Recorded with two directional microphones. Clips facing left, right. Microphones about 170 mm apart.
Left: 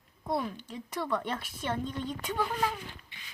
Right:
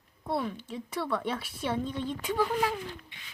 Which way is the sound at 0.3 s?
Centre (ahead or behind).